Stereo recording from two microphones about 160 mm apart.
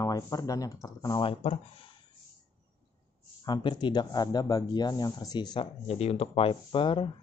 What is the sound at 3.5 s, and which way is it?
Speech, 25° left (ahead or behind).